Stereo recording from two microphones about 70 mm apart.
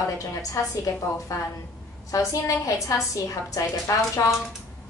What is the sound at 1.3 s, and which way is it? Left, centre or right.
A woman's voice, left.